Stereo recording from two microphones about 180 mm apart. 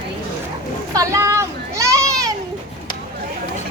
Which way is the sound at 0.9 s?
20° right (ahead or behind).